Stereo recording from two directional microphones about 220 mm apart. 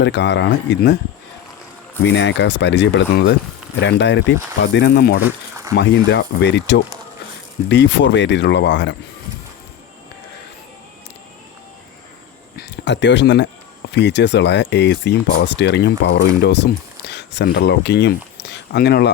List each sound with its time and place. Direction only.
0.0 s speech: 55° left (ahead or behind)
2.0 s speech: 55° left (ahead or behind)
5.2 s a sound: 15° right (ahead or behind)
5.7 s speech: 55° left (ahead or behind)
12.5 s speech: 50° left (ahead or behind)